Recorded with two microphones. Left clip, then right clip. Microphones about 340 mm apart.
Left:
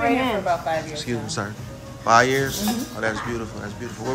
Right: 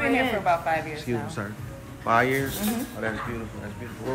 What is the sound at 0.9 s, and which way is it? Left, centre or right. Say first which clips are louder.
A man's voice: left 3 dB; centre.